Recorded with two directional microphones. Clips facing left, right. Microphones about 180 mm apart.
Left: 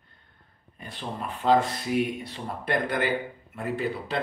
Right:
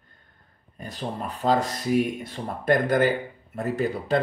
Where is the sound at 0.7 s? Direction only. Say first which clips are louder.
Right 4 dB; 40° right (ahead or behind).